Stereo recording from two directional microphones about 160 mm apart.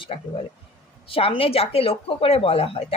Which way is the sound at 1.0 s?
35° left (ahead or behind).